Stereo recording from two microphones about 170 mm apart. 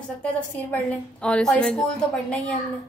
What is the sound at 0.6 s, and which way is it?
A woman's voice, 10° left (ahead or behind).